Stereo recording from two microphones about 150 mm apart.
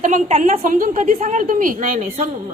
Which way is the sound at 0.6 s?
65° right (ahead or behind).